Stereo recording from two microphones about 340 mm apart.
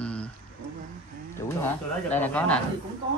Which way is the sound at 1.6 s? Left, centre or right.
Centre.